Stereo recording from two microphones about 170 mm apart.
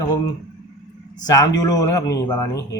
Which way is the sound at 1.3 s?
20° left (ahead or behind).